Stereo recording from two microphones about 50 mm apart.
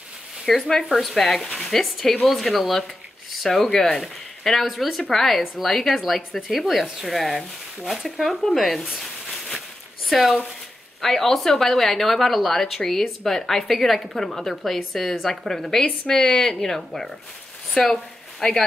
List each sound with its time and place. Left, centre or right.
0.5 s a woman's voice: centre
0.8 s speech: centre
8.8 s a woman's voice: centre
17.7 s a sound: centre